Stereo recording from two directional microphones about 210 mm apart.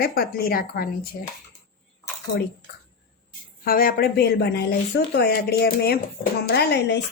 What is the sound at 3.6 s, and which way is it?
A woman's voice, 45° left (ahead or behind).